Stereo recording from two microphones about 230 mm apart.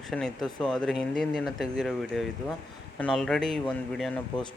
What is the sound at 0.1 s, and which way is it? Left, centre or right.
A man's voice, centre.